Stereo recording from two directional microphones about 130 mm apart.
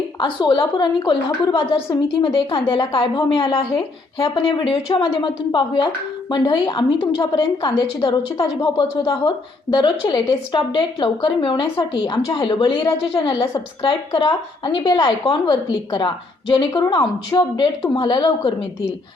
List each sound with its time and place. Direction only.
0.2 s a woman's voice: 35° left (ahead or behind)
1.9 s a woman's voice: 30° left (ahead or behind)